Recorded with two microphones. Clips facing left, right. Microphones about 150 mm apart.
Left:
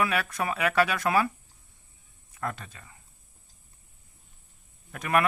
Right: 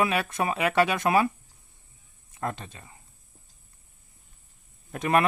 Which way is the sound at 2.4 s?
25° right (ahead or behind).